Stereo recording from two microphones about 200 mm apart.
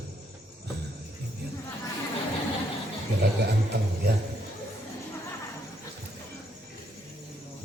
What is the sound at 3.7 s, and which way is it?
Speech, 55° right (ahead or behind).